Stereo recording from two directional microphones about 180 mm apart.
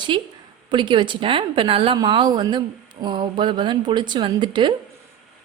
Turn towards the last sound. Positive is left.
turn(degrees=-25)  # may be behind; listen again after turning